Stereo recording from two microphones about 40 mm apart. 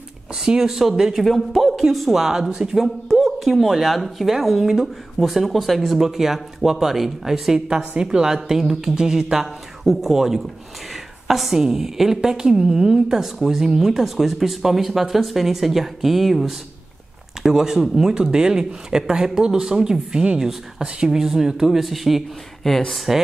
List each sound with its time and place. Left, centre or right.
0.4 s speech: centre
1.2 s speech: centre
3.1 s a sound: centre
3.3 s speech: centre
7.6 s a woman's voice: right
8.0 s a woman's voice: centre
22.7 s speech: centre
23.1 s speech: centre